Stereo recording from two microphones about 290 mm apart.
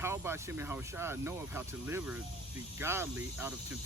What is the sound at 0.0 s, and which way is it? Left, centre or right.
Speech, centre.